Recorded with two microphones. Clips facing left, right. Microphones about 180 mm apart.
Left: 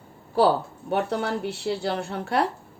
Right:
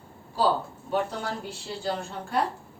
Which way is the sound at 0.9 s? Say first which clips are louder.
Left 4 dB; 65° left (ahead or behind).